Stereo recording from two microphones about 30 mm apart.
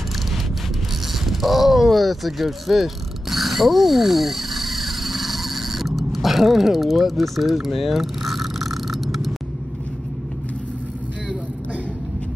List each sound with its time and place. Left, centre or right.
1.2 s mechanisms: centre
6.9 s vehicle: centre